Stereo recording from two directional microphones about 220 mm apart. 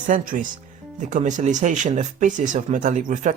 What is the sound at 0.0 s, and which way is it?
Speech, 35° right (ahead or behind).